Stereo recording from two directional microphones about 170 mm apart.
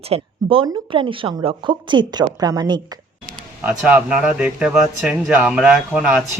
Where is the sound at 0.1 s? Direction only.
35° right (ahead or behind).